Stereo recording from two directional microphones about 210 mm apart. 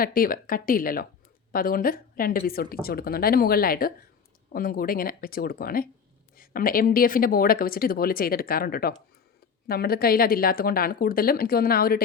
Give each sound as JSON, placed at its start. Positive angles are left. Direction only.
{"t": 0.0, "sound": "speech", "side_deg": 45}